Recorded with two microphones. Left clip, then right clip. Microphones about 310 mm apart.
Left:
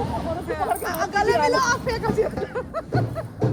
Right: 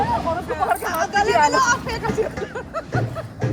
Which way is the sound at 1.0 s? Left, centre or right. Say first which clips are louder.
Right 3 dB; right.